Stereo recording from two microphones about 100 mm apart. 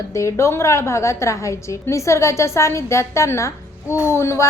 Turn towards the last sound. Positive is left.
turn(degrees=30)  # may be behind; listen again after turning